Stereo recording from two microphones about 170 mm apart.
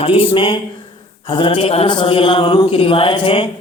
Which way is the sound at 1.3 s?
30° left (ahead or behind).